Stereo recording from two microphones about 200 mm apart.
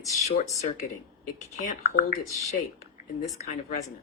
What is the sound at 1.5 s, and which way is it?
Speech, 35° left (ahead or behind).